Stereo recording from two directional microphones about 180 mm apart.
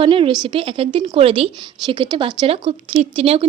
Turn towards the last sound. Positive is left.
turn(degrees=-35)  # may be behind; listen again after turning